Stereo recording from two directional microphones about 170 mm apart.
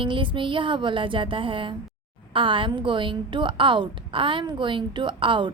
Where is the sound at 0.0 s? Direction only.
30° right (ahead or behind).